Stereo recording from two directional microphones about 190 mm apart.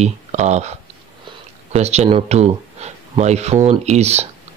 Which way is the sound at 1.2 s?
35° right (ahead or behind).